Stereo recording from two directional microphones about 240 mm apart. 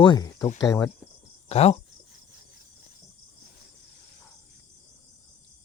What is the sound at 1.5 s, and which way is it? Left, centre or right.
Speech, left.